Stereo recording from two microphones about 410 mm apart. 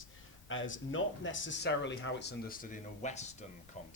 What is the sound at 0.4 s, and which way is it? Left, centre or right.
Speech, left.